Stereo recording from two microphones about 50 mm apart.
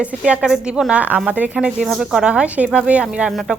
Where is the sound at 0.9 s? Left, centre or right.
Right.